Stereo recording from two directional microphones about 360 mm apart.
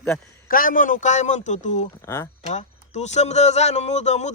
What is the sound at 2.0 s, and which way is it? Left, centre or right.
Speech, centre.